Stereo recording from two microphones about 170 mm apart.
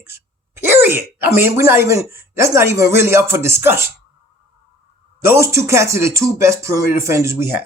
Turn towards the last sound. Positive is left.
turn(degrees=-15)  # may be behind; listen again after turning